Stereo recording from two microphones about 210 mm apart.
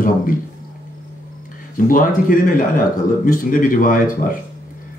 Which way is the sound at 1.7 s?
40° left (ahead or behind).